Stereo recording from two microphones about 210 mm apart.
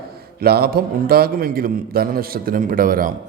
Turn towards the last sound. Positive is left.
turn(degrees=-40)  # may be behind; listen again after turning